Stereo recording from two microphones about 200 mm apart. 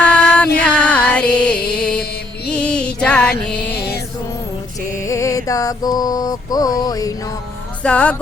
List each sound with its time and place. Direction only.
0.0 s music: 5° left (ahead or behind)
5.0 s mantra: 15° left (ahead or behind)
7.8 s speech: 5° left (ahead or behind)